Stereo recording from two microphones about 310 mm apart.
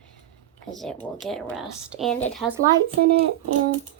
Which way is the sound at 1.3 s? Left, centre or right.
Centre.